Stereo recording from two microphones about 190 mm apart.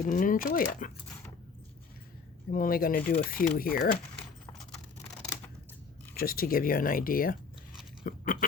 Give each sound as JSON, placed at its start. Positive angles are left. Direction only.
{"t": 0.0, "sound": "speech", "side_deg": 45}
{"t": 2.5, "sound": "speech", "side_deg": 50}
{"t": 4.5, "sound": "keys jangling", "side_deg": 5}
{"t": 6.1, "sound": "speech", "side_deg": 50}
{"t": 8.0, "sound": "crunch", "side_deg": 45}